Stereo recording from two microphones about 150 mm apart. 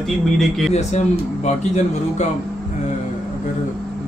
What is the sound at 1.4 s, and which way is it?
Speech, 50° left (ahead or behind).